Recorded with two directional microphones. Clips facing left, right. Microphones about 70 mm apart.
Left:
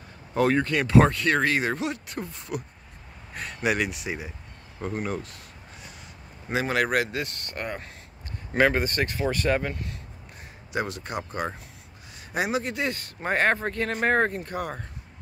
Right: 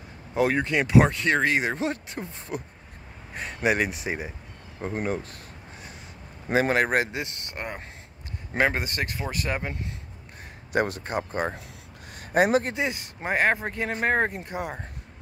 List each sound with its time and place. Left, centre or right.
0.3 s speech: centre; by 5.2 s right
6.5 s speech: right
7.1 s speech: centre
10.7 s speech: right
12.7 s speech: centre